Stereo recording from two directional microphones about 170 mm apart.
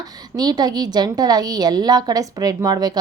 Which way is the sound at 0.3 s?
25° right (ahead or behind).